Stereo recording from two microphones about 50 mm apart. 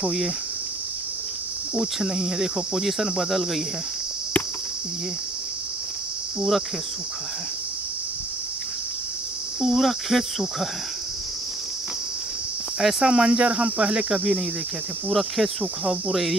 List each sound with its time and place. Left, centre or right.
1.8 s cricket: centre
9.6 s cricket: centre
12.8 s cricket: centre
15.0 s cricket: centre